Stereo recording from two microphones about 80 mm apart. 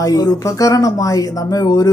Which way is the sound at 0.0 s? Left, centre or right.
Left.